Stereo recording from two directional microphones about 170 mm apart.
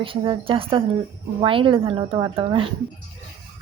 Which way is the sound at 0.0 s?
30° right (ahead or behind).